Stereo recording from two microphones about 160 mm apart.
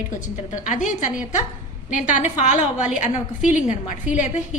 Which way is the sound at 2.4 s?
50° left (ahead or behind).